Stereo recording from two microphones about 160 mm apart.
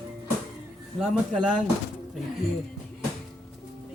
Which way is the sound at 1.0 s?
5° right (ahead or behind).